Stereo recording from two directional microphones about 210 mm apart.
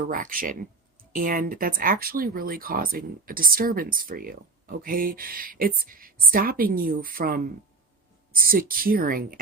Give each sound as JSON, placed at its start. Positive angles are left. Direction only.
{"t": 0.0, "sound": "speech", "side_deg": -40}